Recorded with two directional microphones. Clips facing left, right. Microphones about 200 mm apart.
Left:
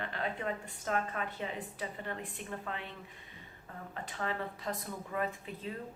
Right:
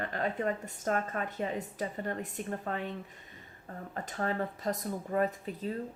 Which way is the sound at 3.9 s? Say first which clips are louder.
Right 5 dB; 40° right (ahead or behind).